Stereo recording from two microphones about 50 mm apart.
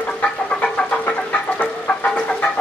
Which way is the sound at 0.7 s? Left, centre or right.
Left.